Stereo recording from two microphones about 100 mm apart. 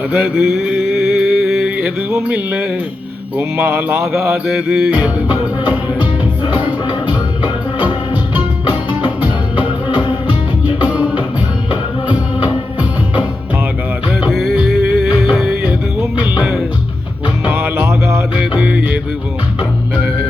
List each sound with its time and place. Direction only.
0.1 s mantra: 10° right (ahead or behind)
2.0 s music: 20° right (ahead or behind)
3.3 s mantra: 20° right (ahead or behind)
4.4 s music: 5° right (ahead or behind)
6.6 s music: 50° left (ahead or behind)
9.9 s music: 50° left (ahead or behind)
14.3 s music: centre (ahead or behind)
16.2 s music: 15° right (ahead or behind)
18.3 s music: 10° right (ahead or behind)